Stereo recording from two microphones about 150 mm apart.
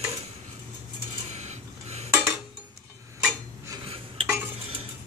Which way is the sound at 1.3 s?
50° right (ahead or behind).